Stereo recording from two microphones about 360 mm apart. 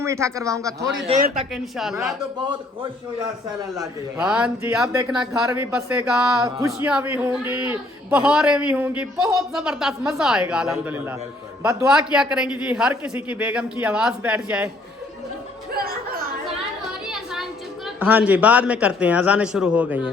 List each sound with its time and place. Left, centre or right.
0.0 s a man's voice: centre
1.7 s speech: centre
3.8 s speech: centre
15.7 s music: right
17.8 s speech: centre